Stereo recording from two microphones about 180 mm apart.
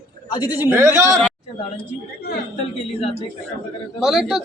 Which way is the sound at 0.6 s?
15° right (ahead or behind).